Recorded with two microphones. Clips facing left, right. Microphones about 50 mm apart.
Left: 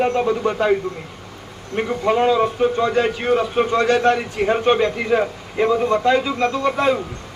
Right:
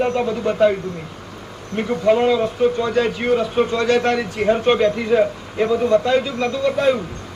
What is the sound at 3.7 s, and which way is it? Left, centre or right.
Speech, left.